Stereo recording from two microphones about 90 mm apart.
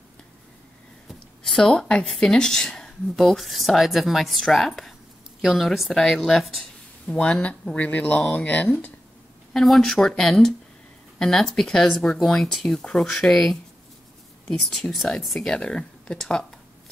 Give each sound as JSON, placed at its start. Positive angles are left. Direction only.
{"t": 1.0, "sound": "speech", "side_deg": 5}
{"t": 9.5, "sound": "speech", "side_deg": 5}